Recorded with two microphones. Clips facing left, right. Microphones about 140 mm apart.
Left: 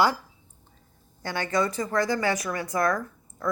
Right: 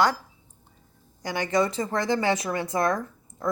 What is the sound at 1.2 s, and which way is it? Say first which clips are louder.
Speech: right 2 dB; 15° right (ahead or behind).